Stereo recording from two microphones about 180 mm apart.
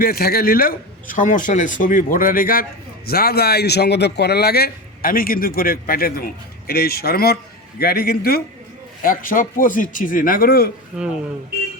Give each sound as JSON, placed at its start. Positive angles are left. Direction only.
{"t": 0.0, "sound": "a man's voice", "side_deg": 55}